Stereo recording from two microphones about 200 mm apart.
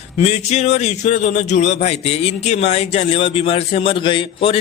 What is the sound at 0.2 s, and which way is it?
A man's voice, 35° left (ahead or behind).